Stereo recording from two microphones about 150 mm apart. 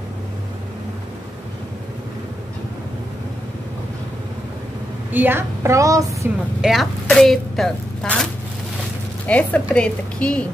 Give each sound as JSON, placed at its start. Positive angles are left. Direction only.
{"t": 5.1, "sound": "a woman's voice", "side_deg": -15}
{"t": 6.6, "sound": "speech", "side_deg": 0}
{"t": 9.3, "sound": "a woman's voice", "side_deg": 10}